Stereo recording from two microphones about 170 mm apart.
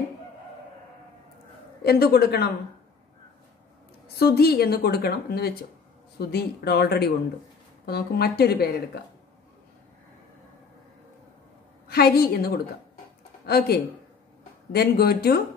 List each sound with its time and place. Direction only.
1.8 s a woman's voice: 70° left (ahead or behind)
4.2 s a woman's voice: 70° left (ahead or behind)
11.9 s a woman's voice: 65° left (ahead or behind)